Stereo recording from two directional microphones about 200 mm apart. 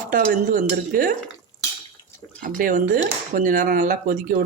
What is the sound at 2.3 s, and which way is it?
Speech, 45° right (ahead or behind).